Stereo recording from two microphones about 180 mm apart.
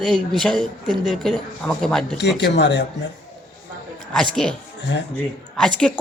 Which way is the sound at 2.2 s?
70° left (ahead or behind).